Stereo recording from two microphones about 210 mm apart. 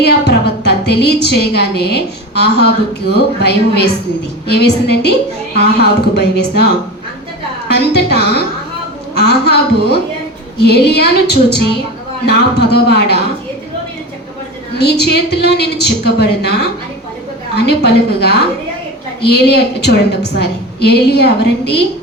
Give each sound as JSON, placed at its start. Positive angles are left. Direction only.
{"t": 0.0, "sound": "a woman's voice", "side_deg": 50}
{"t": 7.7, "sound": "a woman's voice", "side_deg": 50}
{"t": 14.8, "sound": "a woman's voice", "side_deg": 50}